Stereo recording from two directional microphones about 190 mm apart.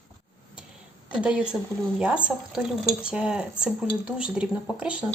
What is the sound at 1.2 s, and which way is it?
Speech, 5° right (ahead or behind).